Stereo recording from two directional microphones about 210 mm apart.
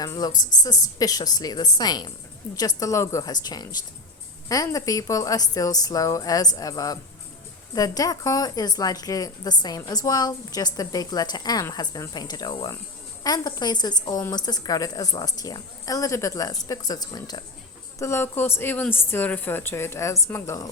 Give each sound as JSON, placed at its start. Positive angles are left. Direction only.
{"t": 0.0, "sound": "a woman's voice", "side_deg": 20}